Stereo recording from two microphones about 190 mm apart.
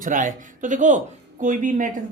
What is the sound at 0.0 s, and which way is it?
Speech, 45° right (ahead or behind).